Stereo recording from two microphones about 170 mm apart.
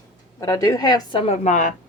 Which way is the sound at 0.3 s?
20° left (ahead or behind).